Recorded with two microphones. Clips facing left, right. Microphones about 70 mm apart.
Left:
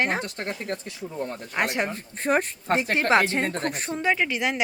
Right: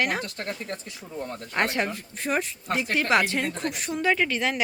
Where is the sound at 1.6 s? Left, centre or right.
Left.